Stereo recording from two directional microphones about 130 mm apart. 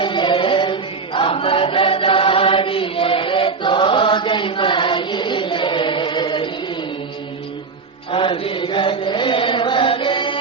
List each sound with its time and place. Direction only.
0.0 s choir: 35° left (ahead or behind)
8.1 s mantra: 45° left (ahead or behind)